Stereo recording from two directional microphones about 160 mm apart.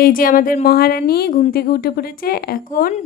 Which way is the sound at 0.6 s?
75° left (ahead or behind).